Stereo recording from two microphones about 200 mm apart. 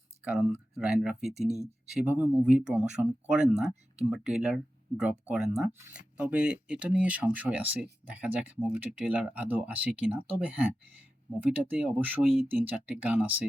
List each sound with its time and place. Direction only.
0.3 s speech: 5° right (ahead or behind)
1.2 s speech: 35° right (ahead or behind)
1.9 s speech: 5° right (ahead or behind)